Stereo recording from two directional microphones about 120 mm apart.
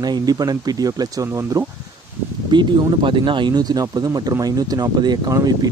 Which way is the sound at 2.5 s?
40° right (ahead or behind).